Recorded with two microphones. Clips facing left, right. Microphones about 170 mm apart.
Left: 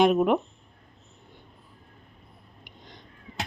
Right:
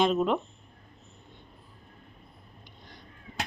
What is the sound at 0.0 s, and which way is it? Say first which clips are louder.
Speech: left 4 dB; 15° left (ahead or behind).